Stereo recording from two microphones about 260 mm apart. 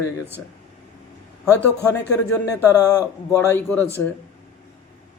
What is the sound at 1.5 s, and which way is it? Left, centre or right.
A man's voice, centre.